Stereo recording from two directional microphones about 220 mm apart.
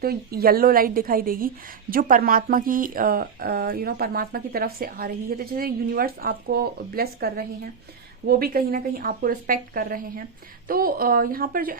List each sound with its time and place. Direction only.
0.0 s a woman's voice: 45° right (ahead or behind)